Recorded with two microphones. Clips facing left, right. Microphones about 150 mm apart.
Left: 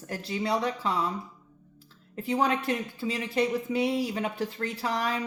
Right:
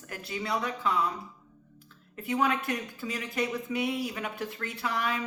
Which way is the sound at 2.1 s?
30° left (ahead or behind).